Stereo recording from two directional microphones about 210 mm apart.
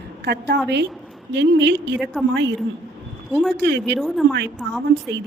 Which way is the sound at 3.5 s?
55° right (ahead or behind).